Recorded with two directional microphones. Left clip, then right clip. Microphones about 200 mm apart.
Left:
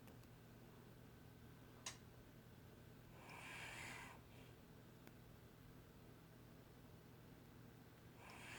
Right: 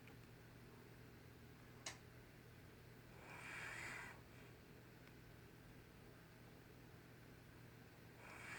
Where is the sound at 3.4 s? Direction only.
10° right (ahead or behind).